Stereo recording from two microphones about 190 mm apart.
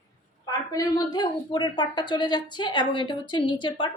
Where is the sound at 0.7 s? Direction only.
20° left (ahead or behind).